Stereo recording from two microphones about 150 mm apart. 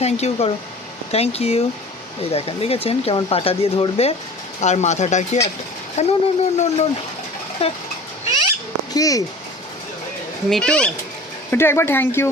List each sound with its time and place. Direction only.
0.0 s speech: 45° left (ahead or behind)
9.0 s speech: 25° left (ahead or behind)
10.5 s speech: 5° left (ahead or behind)
11.5 s speech: 15° left (ahead or behind)